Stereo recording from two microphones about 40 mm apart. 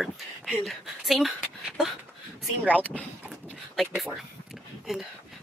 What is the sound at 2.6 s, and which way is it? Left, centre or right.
Speech, right.